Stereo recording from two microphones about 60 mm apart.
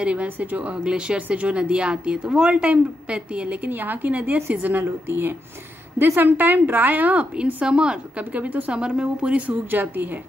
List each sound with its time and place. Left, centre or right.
0.0 s a woman's voice: right